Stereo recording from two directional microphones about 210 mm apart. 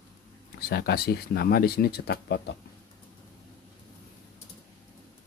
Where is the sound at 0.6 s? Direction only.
50° left (ahead or behind).